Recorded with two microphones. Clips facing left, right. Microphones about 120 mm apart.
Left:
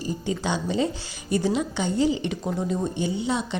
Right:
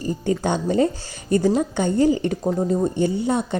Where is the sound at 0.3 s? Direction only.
50° right (ahead or behind).